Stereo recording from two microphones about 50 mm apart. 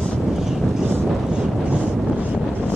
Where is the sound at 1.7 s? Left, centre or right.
Right.